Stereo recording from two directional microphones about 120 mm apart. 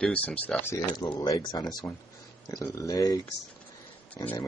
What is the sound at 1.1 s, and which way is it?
Speech, 35° left (ahead or behind).